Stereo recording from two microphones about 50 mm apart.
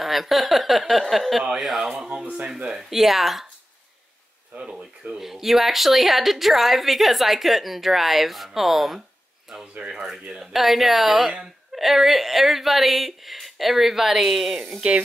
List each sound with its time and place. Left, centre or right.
0.0 s a woman's voice: centre
2.2 s speech: right
2.8 s a woman's voice: centre
5.0 s a woman's voice: centre
9.5 s a woman's voice: centre